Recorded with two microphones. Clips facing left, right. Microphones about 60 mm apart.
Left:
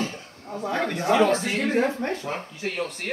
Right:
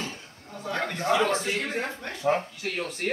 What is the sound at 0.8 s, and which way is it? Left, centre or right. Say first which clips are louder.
Speech: left 3 dB; centre.